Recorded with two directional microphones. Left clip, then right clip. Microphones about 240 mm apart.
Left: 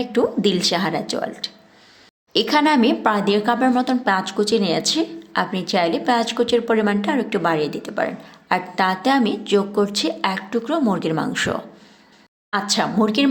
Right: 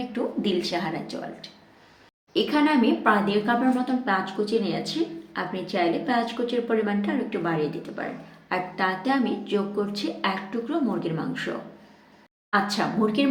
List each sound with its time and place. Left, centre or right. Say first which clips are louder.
0.1 s speech: left 9 dB; left